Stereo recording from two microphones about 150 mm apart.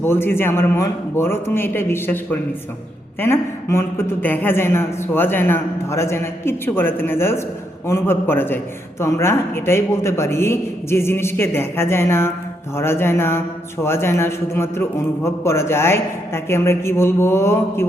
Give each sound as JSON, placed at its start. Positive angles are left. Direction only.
{"t": 0.0, "sound": "a man's voice", "side_deg": 15}